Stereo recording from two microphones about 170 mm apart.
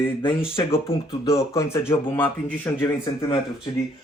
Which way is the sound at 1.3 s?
15° left (ahead or behind).